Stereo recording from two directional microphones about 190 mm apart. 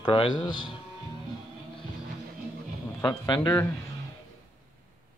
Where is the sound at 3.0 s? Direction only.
25° left (ahead or behind).